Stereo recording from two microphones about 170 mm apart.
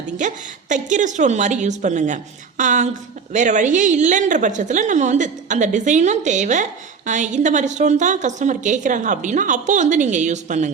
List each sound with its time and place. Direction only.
0.2 s a woman's voice: 45° right (ahead or behind)